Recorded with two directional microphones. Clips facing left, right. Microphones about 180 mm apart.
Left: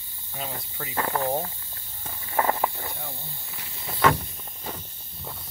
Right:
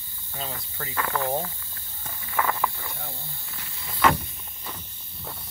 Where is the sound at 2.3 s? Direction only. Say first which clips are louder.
Left 2 dB; 30° left (ahead or behind).